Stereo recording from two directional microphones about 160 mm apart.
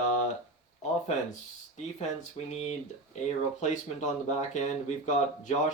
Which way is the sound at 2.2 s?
45° left (ahead or behind).